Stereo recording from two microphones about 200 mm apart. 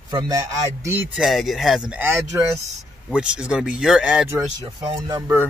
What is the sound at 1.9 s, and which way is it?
A man's voice, 10° right (ahead or behind).